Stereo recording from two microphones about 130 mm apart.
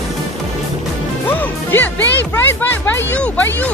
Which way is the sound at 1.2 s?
15° left (ahead or behind).